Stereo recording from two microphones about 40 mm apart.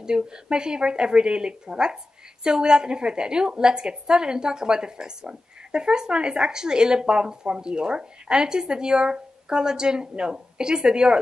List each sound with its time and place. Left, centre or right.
0.0 s a woman's voice: centre